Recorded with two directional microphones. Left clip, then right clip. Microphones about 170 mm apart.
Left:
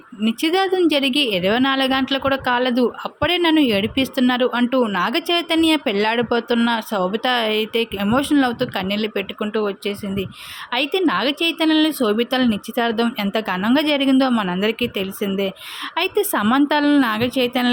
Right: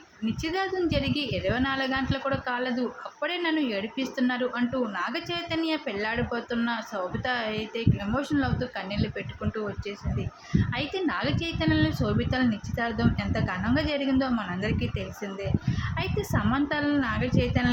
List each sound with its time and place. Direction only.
0.4 s a woman's voice: 65° left (ahead or behind)